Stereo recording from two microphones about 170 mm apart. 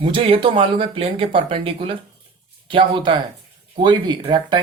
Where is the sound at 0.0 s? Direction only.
30° right (ahead or behind).